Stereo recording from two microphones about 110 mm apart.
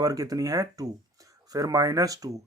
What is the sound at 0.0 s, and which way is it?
Speech, 35° right (ahead or behind).